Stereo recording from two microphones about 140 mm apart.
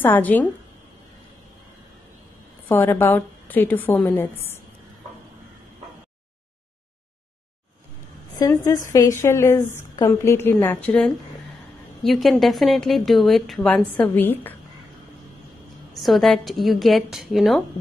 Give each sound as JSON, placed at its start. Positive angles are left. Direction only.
{"t": 0.0, "sound": "a woman's voice", "side_deg": 10}
{"t": 2.7, "sound": "a woman's voice", "side_deg": 15}
{"t": 8.4, "sound": "a woman's voice", "side_deg": 25}
{"t": 15.9, "sound": "a woman's voice", "side_deg": 0}